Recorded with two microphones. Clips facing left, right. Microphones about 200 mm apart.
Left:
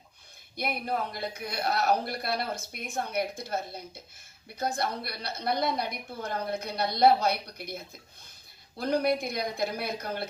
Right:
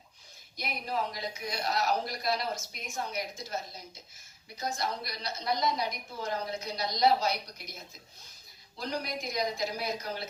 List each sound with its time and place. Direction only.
0.5 s speech: 55° left (ahead or behind)
8.8 s speech: 55° left (ahead or behind)